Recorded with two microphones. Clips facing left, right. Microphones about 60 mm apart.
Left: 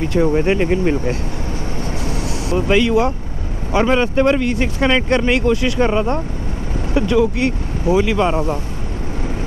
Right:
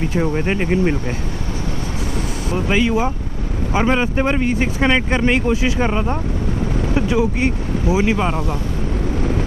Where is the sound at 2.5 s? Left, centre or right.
Centre.